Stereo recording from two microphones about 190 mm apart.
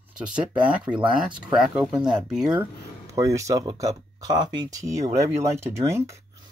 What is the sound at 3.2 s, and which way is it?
Speech, 15° right (ahead or behind).